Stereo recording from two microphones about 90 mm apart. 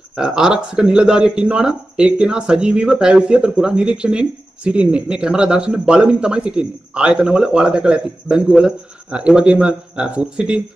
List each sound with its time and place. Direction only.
0.1 s speech: 10° right (ahead or behind)